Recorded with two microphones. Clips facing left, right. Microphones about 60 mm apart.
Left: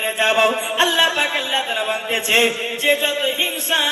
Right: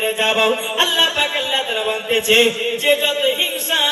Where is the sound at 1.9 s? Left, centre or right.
Left.